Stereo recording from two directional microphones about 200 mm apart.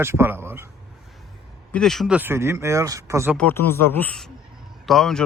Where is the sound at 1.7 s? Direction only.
Centre (ahead or behind); by 3.3 s 15° right (ahead or behind).